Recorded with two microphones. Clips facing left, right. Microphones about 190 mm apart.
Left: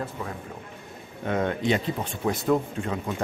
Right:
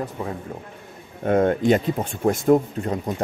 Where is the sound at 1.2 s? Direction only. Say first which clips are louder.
Right 7 dB; 45° right (ahead or behind).